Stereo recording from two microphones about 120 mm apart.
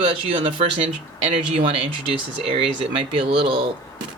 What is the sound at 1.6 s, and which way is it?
Speech, 55° right (ahead or behind).